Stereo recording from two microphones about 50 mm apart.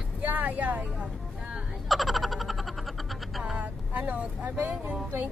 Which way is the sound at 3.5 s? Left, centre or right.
Right.